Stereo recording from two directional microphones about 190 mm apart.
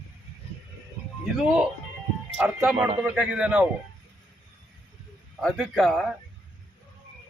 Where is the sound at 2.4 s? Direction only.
5° right (ahead or behind).